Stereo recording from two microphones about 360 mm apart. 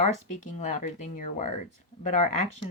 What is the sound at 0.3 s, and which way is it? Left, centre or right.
A woman's voice, centre.